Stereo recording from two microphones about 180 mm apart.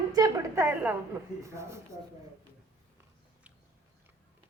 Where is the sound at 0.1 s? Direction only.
20° right (ahead or behind).